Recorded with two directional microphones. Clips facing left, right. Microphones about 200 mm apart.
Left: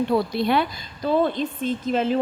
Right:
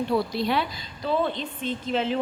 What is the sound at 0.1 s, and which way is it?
A woman's voice, 55° left (ahead or behind).